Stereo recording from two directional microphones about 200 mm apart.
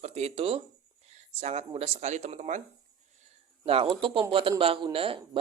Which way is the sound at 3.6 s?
30° right (ahead or behind).